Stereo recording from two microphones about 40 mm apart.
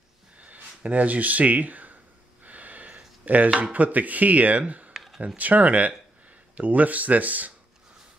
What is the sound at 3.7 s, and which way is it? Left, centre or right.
Speech, right.